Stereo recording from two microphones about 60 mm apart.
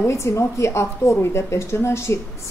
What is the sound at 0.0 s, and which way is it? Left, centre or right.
A woman's voice, left.